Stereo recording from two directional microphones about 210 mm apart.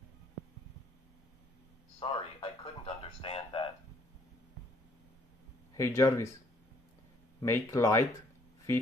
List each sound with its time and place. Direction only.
2.0 s a sound: 25° left (ahead or behind)
5.8 s speech: 15° left (ahead or behind)
7.4 s speech: 15° left (ahead or behind)